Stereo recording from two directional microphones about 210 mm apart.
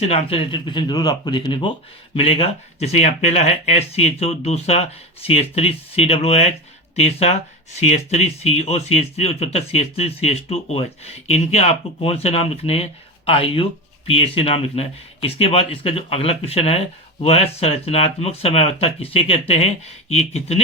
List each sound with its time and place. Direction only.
0.0 s speech: 30° left (ahead or behind)